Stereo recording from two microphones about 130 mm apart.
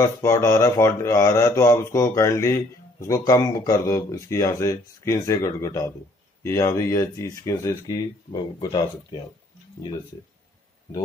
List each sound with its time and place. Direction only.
0.0 s speech: 20° left (ahead or behind); by 9.2 s 35° left (ahead or behind)